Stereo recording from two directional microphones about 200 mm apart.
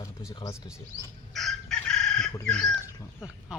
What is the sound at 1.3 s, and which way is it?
Chicken, centre (ahead or behind).